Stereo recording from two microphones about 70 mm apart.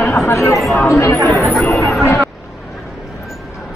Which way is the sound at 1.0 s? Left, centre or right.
Left.